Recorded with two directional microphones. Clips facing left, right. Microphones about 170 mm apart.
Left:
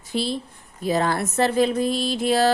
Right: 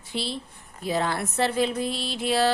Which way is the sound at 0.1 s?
45° left (ahead or behind).